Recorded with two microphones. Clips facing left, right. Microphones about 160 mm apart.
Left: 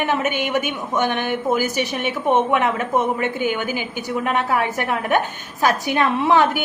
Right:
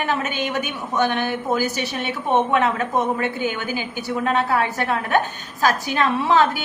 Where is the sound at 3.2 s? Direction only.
15° left (ahead or behind).